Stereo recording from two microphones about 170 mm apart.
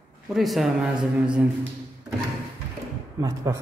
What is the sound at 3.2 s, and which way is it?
Speech, 20° right (ahead or behind).